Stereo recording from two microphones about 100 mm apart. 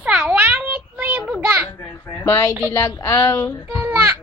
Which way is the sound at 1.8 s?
25° left (ahead or behind).